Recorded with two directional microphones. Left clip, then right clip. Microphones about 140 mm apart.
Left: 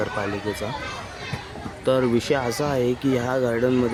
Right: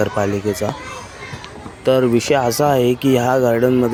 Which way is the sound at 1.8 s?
25° right (ahead or behind).